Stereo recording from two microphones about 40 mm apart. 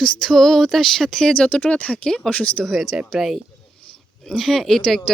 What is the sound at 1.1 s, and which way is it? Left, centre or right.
Speech, left.